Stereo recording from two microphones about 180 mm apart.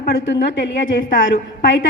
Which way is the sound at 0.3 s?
80° left.